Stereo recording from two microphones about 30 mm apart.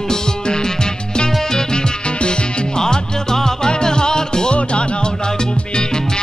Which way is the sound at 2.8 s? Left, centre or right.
Centre.